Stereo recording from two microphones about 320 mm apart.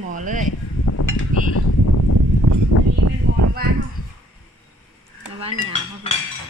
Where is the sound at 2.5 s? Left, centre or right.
Right.